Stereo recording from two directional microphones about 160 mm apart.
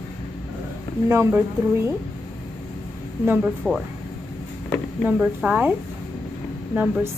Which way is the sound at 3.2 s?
10° right (ahead or behind).